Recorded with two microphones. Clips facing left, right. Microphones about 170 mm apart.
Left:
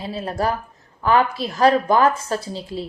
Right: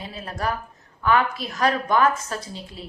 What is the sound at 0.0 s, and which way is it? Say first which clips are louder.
A woman's voice: left 5 dB; 30° left (ahead or behind).